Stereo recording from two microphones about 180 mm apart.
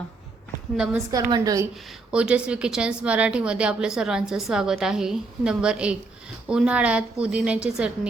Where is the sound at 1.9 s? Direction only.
5° right (ahead or behind).